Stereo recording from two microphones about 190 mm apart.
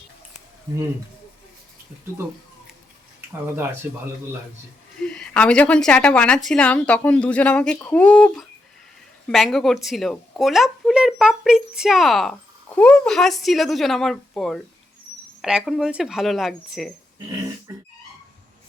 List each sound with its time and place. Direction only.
3.4 s speech: 10° right (ahead or behind)
4.9 s speech: 5° left (ahead or behind)